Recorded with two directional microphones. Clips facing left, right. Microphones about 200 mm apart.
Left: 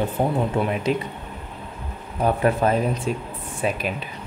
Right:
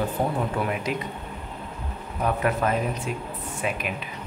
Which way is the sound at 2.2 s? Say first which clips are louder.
Left 4 dB; 30° left (ahead or behind).